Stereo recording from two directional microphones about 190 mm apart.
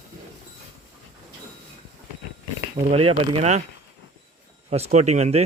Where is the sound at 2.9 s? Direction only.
30° right (ahead or behind).